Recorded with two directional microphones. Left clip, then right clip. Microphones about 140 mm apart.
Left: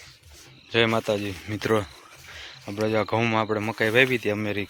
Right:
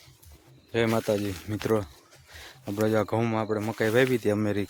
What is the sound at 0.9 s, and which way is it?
Speech, 35° right (ahead or behind).